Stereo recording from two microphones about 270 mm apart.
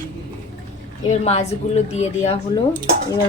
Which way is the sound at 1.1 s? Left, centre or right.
Left.